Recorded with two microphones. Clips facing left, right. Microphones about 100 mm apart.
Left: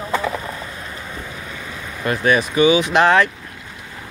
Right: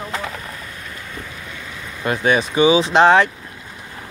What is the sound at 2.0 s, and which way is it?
Speech, 15° right (ahead or behind).